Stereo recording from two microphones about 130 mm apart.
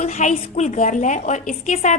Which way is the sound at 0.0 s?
60° left (ahead or behind).